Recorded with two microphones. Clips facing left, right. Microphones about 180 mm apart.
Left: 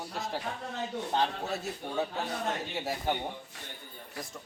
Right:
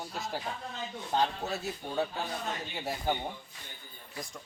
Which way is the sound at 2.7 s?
Centre (ahead or behind).